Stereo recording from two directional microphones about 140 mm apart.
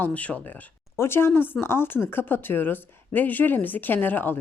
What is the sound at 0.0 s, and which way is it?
A woman's voice, 10° left (ahead or behind).